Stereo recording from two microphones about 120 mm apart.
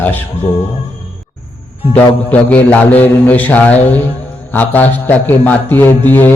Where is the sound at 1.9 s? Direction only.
15° left (ahead or behind).